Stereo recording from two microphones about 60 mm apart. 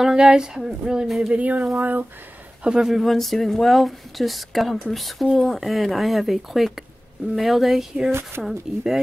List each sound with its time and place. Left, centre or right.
0.0 s speech: centre
1.3 s speech: right
2.6 s speech: centre
2.9 s speech: centre
8.1 s speech: right
8.5 s speech: centre